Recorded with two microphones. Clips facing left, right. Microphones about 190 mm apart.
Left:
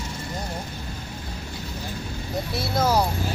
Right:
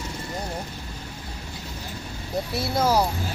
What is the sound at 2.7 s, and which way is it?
Speech, 10° right (ahead or behind).